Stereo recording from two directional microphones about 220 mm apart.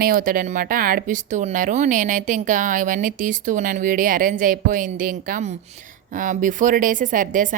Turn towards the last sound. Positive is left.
turn(degrees=-35)  # may be behind; listen again after turning